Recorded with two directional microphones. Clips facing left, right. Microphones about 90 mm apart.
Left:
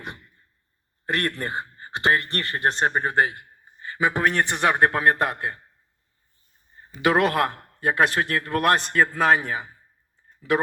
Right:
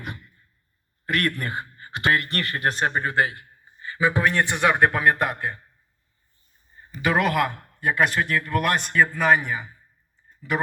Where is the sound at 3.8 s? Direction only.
45° left (ahead or behind).